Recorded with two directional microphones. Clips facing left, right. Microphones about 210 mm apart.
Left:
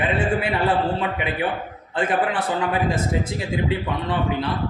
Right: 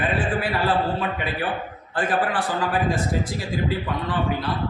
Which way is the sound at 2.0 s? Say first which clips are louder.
Left 1 dB; 25° left (ahead or behind).